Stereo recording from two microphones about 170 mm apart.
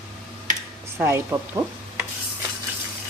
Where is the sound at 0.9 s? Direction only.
15° right (ahead or behind).